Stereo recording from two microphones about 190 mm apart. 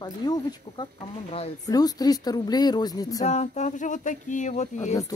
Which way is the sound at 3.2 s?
35° left (ahead or behind).